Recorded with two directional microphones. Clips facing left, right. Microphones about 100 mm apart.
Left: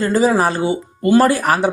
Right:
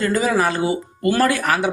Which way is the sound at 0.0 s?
35° left (ahead or behind).